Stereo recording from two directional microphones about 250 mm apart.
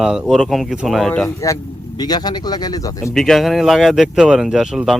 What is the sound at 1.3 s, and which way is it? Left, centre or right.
Speech, centre.